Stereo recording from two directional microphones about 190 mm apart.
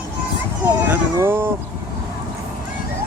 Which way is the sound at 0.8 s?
10° right (ahead or behind).